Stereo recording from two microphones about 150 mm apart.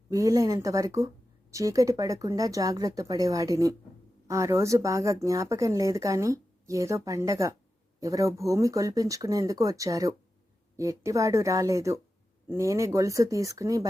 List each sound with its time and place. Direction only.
0.1 s speech: 20° right (ahead or behind)